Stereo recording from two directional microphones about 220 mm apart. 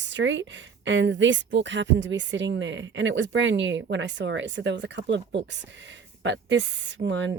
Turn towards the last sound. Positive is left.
turn(degrees=-55)  # may be behind; listen again after turning